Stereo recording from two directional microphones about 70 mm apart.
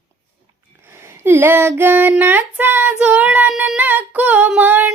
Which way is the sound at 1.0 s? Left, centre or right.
Right.